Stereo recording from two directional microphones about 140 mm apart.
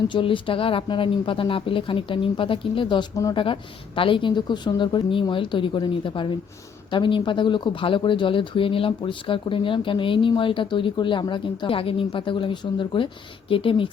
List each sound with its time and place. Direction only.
0.1 s speech: 35° left (ahead or behind)